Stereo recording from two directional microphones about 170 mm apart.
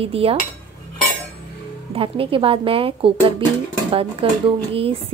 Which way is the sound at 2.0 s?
35° right (ahead or behind).